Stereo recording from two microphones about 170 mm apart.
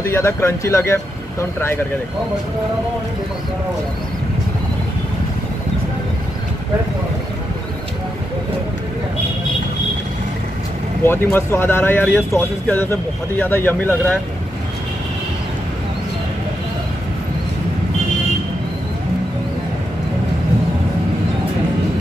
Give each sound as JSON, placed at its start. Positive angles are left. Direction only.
{"t": 0.0, "sound": "speech", "side_deg": 15}
{"t": 11.1, "sound": "speech", "side_deg": 15}